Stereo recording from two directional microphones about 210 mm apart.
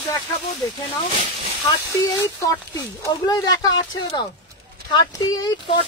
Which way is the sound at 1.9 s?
15° left (ahead or behind).